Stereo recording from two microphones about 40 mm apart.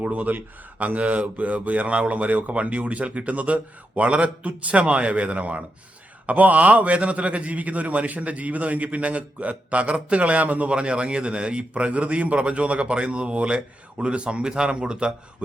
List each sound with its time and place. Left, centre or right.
0.0 s speech: right
10.7 s a man's voice: right